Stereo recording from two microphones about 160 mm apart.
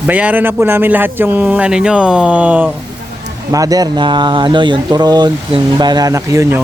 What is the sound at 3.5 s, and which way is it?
A man's voice, 20° right (ahead or behind).